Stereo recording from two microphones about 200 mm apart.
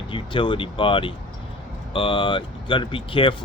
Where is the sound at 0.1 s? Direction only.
25° left (ahead or behind).